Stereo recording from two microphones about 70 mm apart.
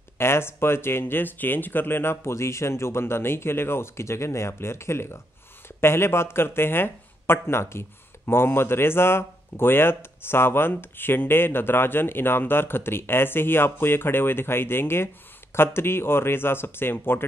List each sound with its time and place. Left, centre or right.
0.2 s speech: left